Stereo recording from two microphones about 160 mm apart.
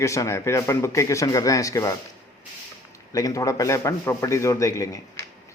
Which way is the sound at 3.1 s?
20° left (ahead or behind).